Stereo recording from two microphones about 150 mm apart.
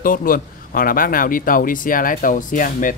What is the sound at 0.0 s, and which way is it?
A man's voice, 70° left (ahead or behind).